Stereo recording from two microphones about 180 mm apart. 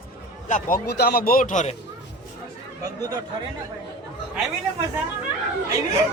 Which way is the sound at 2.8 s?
20° right (ahead or behind).